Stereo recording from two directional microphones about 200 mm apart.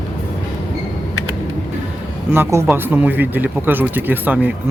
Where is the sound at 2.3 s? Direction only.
10° right (ahead or behind).